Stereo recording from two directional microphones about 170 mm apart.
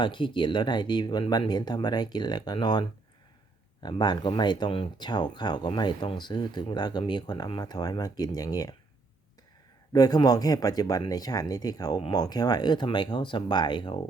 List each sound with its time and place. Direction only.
0.0 s speech: 30° left (ahead or behind)
3.8 s speech: 25° left (ahead or behind)
9.9 s speech: 25° left (ahead or behind)